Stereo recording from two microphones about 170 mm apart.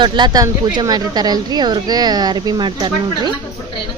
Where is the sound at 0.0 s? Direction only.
25° right (ahead or behind).